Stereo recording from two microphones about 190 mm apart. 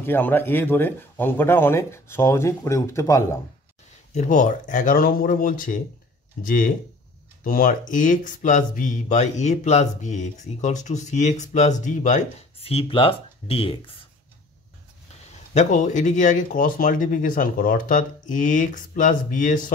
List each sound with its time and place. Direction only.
0.0 s speech: 10° left (ahead or behind)
4.1 s speech: 40° left (ahead or behind)
15.5 s speech: 40° left (ahead or behind)